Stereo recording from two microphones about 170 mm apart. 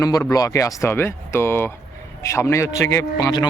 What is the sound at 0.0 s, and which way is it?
Speech, 20° left (ahead or behind).